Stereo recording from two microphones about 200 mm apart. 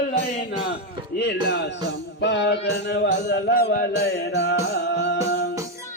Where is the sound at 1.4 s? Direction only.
55° left (ahead or behind).